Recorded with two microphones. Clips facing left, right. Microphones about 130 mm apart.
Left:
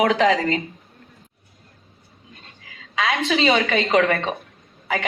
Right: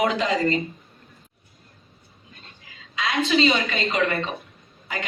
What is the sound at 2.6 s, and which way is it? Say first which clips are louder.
A woman's voice: left 5 dB; 90° left.